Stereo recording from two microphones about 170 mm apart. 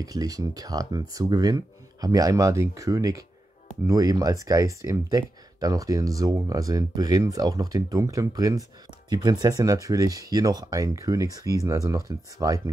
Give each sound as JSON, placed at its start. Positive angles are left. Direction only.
{"t": 0.0, "sound": "speech", "side_deg": -20}